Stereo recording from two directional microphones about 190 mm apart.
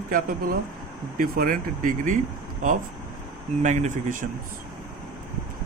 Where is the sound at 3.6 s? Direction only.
40° right (ahead or behind).